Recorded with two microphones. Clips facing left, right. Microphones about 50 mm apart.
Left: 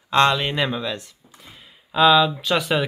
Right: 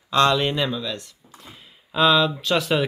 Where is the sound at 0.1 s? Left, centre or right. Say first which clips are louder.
Left 1 dB; left.